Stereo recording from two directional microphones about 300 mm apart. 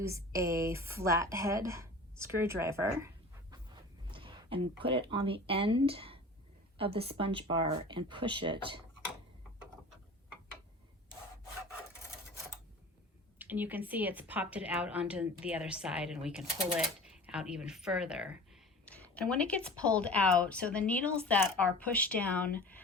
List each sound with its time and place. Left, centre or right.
0.0 s a woman's voice: centre
4.1 s a woman's voice: centre
13.4 s a woman's voice: centre